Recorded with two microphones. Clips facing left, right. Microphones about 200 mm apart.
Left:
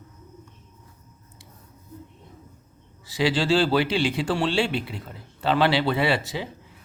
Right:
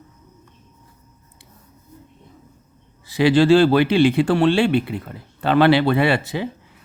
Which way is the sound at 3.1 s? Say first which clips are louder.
Right 8 dB; 55° right (ahead or behind).